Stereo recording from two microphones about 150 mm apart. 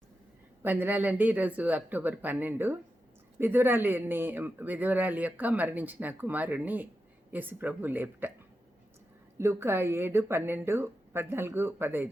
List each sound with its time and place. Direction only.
0.6 s a man's voice: 10° right (ahead or behind)
9.4 s a man's voice: 15° right (ahead or behind)